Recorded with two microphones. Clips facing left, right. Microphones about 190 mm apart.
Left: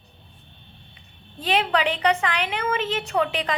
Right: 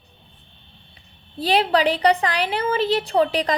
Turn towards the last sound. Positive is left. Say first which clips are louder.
# right 5 dB
turn(degrees=-40)  # may be behind; listen again after turning